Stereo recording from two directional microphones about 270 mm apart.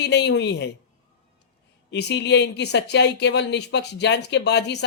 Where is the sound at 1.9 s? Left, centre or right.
Left.